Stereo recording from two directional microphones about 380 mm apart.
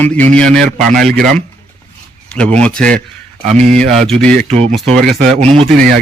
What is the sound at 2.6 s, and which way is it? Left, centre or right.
A man's voice, centre.